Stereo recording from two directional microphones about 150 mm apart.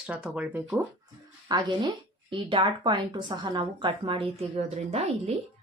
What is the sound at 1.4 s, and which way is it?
Speech, 30° right (ahead or behind).